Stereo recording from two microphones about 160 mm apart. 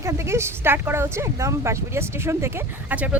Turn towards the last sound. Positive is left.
turn(degrees=-10)  # may be behind; listen again after turning